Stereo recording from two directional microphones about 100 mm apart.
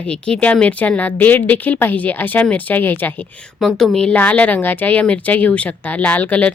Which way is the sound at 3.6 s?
Centre (ahead or behind).